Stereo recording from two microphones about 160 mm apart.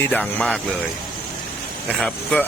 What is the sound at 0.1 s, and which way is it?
Speech, 10° left (ahead or behind).